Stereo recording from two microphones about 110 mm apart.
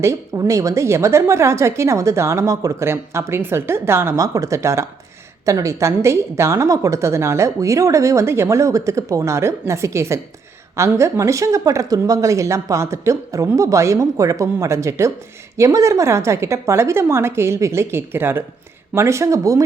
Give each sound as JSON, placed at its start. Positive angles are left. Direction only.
{"t": 0.0, "sound": "a woman's voice", "side_deg": -30}